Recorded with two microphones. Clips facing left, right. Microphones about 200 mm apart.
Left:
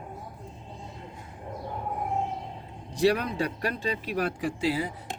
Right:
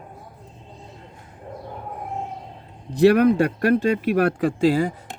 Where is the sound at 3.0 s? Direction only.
55° right (ahead or behind).